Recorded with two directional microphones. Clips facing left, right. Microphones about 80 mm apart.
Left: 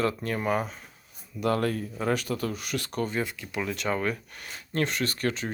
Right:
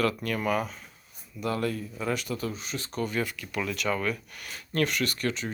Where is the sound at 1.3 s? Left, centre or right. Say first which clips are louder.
Left 3 dB; left.